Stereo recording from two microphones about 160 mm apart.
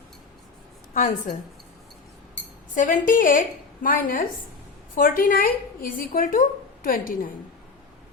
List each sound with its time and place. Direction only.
0.9 s a woman's voice: 55° left (ahead or behind)
2.7 s a woman's voice: 55° left (ahead or behind)